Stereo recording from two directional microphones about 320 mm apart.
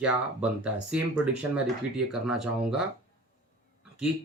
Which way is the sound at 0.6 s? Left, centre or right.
Centre.